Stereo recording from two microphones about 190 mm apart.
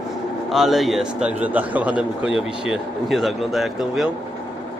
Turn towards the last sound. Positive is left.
turn(degrees=0)  # may be behind; listen again after turning